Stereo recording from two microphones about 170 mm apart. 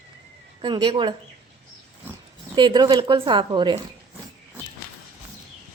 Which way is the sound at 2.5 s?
25° right (ahead or behind).